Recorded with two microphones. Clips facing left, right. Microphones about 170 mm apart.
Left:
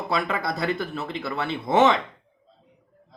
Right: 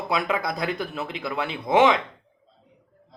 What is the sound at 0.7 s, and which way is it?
Speech, 15° right (ahead or behind).